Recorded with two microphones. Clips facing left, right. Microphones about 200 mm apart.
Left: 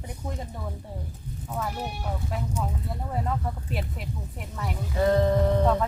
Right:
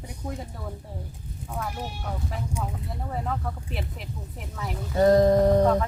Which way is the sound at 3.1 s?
Centre (ahead or behind).